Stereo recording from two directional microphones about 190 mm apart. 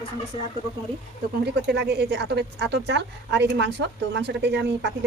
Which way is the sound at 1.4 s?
60° right (ahead or behind).